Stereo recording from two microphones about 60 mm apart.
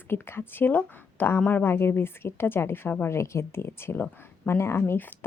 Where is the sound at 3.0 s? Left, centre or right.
Left.